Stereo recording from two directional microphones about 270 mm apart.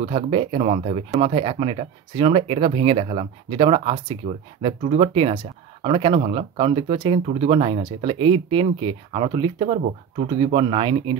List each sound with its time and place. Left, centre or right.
0.0 s speech: centre